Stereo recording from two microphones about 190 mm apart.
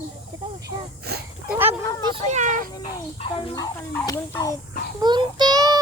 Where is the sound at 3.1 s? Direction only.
30° left (ahead or behind).